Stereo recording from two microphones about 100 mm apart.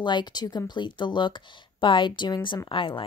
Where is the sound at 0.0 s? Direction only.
50° left (ahead or behind).